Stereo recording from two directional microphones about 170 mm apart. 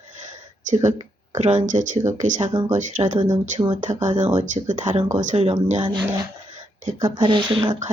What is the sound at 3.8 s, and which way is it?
Speech, 45° right (ahead or behind).